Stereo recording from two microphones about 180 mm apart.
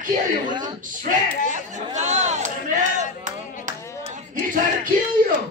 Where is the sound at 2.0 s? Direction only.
40° right (ahead or behind).